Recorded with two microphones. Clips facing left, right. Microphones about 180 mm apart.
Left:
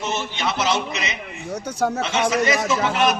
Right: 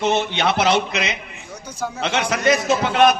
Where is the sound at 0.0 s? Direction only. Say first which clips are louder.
Right 6 dB; 65° right (ahead or behind).